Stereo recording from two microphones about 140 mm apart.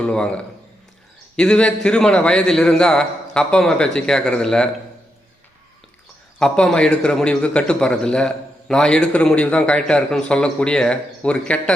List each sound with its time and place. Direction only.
0.0 s a man's voice: 5° left (ahead or behind)
6.4 s a man's voice: 5° left (ahead or behind)